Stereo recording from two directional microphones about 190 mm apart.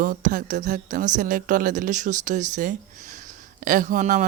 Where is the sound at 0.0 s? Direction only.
45° right (ahead or behind).